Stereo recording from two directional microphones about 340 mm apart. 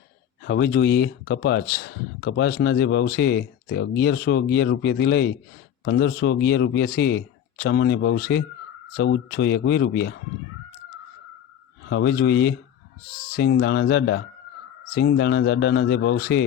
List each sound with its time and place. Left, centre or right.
0.4 s speech: left
11.9 s speech: left